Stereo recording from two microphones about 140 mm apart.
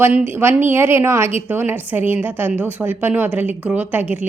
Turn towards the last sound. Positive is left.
turn(degrees=-10)  # may be behind; listen again after turning